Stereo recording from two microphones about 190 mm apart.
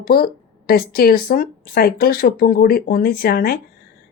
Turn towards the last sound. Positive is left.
turn(degrees=55)  # may be behind; listen again after turning